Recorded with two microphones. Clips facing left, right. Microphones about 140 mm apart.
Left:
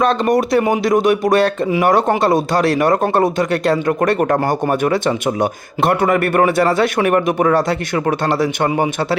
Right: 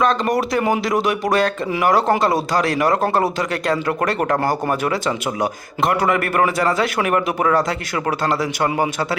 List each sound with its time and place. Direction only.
0.0 s a man's voice: 20° left (ahead or behind)